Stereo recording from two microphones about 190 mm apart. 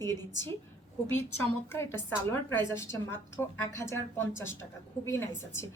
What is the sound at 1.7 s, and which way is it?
A woman's voice, 15° left (ahead or behind).